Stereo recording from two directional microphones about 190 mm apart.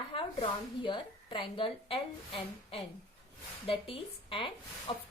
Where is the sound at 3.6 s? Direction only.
30° left (ahead or behind).